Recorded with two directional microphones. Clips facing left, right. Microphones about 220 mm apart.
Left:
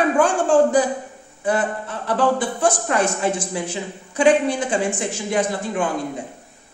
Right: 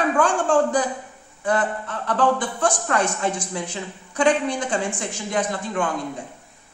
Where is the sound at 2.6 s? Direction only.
20° left (ahead or behind).